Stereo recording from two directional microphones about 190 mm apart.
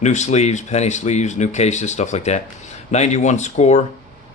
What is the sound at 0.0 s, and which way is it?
Speech, 40° left (ahead or behind).